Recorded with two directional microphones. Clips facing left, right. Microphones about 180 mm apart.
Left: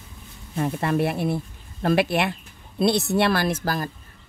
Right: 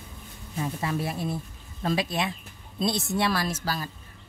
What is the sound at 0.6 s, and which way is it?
A woman's voice, 60° left (ahead or behind).